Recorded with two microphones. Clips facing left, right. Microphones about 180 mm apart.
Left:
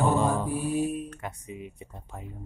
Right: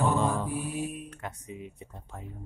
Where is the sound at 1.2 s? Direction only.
10° left (ahead or behind).